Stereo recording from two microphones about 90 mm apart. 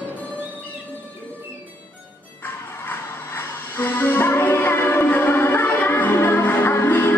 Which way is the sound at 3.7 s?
25° left (ahead or behind).